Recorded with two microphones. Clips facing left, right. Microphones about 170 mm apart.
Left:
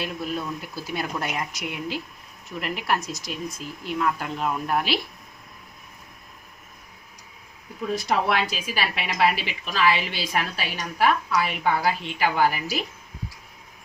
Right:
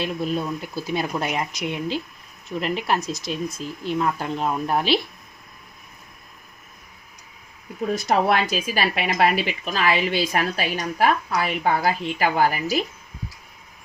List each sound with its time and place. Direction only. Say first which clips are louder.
0.0 s speech: right 4 dB; 25° right (ahead or behind)
7.9 s a woman's voice: right 3 dB; 45° right (ahead or behind)